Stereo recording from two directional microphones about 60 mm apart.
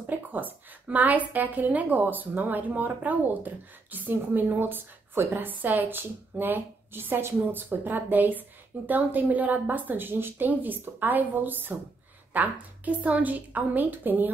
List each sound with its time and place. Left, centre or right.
0.0 s a woman's voice: right